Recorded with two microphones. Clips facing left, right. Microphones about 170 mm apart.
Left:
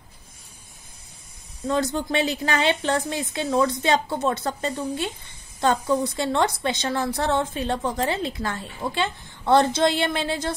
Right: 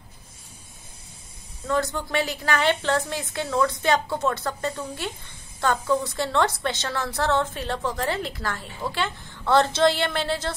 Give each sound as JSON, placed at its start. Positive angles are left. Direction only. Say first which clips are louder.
{"t": 1.7, "sound": "a woman's voice", "louder": "left 2 dB", "side_deg": 20}